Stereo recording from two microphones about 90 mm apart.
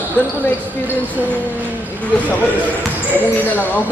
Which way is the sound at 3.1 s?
20° left (ahead or behind).